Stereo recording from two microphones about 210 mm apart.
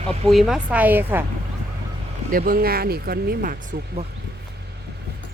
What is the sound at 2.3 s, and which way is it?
Speech, 45° right (ahead or behind).